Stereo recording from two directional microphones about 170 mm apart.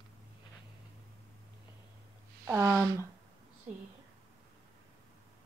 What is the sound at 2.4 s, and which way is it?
Speech, 15° right (ahead or behind).